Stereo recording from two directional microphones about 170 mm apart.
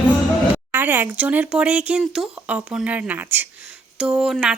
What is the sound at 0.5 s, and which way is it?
Speech, 10° right (ahead or behind).